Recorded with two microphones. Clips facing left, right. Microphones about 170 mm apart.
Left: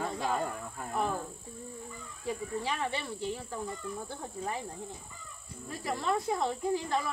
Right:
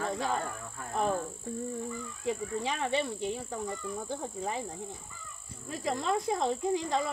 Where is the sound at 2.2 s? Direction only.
20° right (ahead or behind).